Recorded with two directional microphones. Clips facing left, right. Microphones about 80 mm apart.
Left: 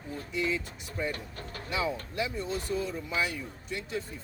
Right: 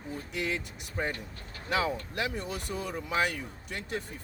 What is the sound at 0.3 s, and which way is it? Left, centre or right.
Speech, right.